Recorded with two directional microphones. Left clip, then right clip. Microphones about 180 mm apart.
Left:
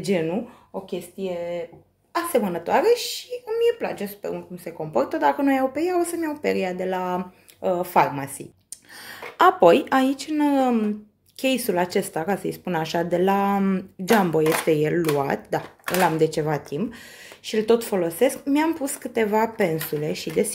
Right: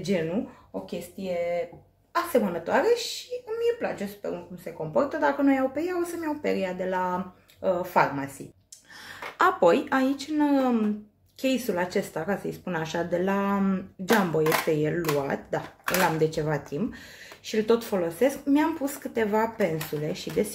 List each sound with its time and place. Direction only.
1.2 s speech: 30° left (ahead or behind)
2.1 s a woman's voice: 45° left (ahead or behind)
9.4 s speech: 35° left (ahead or behind)